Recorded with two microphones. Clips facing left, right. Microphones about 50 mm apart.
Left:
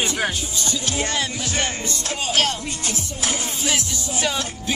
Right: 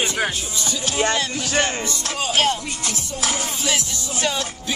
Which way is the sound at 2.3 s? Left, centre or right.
Centre.